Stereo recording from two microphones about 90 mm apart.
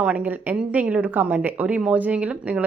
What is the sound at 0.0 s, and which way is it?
A woman's voice, 15° right (ahead or behind).